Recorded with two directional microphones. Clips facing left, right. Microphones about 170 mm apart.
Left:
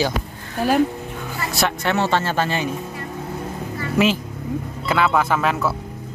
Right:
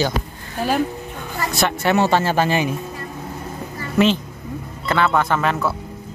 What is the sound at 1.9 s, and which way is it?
Speech, 10° right (ahead or behind).